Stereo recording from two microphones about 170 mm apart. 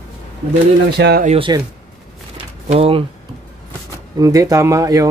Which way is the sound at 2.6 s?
35° right (ahead or behind).